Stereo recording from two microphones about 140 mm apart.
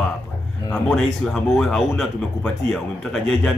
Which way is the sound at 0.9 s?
Centre (ahead or behind).